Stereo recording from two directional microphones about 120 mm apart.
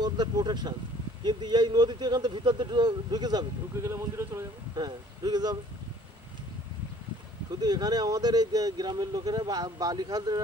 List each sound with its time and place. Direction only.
0.0 s speech: 35° right (ahead or behind)
3.9 s speech: 20° right (ahead or behind)
4.7 s speech: 35° right (ahead or behind)
7.6 s speech: 35° right (ahead or behind)